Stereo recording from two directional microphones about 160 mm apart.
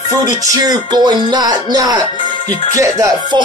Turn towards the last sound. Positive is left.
turn(degrees=-25)  # may be behind; listen again after turning